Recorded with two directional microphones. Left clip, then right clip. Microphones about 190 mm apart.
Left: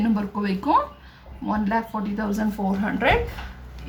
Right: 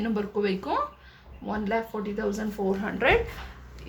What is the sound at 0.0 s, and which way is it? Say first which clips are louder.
A woman's voice: left 1 dB; 20° right (ahead or behind).